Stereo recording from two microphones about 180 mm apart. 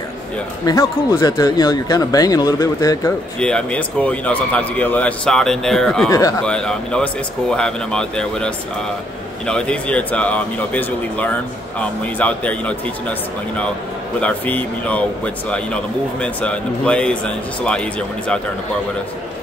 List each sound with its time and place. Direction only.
0.7 s speech: 20° left (ahead or behind)
3.3 s speech: 5° left (ahead or behind)
6.0 s speech: 20° left (ahead or behind)
6.4 s speech: 5° left (ahead or behind)
14.2 s speech: 10° left (ahead or behind)